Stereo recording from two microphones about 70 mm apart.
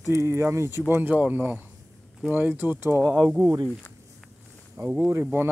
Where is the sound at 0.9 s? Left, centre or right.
Right.